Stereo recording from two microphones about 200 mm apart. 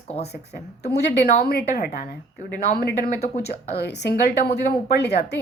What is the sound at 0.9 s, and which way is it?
A woman's voice, 55° left (ahead or behind).